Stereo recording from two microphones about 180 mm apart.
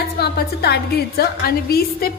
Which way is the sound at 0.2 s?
65° left (ahead or behind).